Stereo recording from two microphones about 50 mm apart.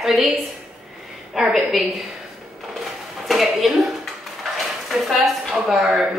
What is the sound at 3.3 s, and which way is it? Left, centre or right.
Speech, centre.